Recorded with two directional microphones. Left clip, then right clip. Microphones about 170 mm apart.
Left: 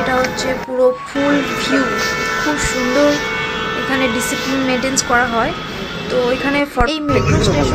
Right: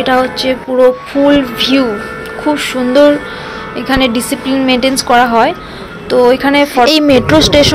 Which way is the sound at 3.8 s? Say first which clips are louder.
Right 7 dB; 15° right (ahead or behind).